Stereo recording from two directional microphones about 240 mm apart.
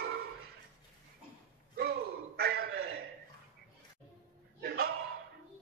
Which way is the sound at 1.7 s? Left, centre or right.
Right.